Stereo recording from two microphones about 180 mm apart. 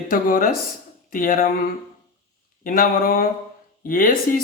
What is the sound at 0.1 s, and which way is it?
Speech, 50° left (ahead or behind).